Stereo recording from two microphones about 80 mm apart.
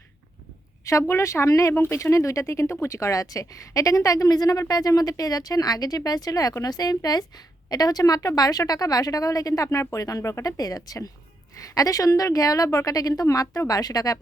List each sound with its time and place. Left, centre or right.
0.9 s a woman's voice: left